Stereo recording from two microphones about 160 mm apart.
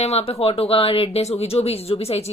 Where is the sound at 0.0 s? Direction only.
40° left (ahead or behind).